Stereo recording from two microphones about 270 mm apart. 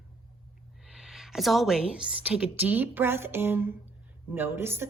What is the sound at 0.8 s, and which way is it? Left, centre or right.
A woman's voice, centre.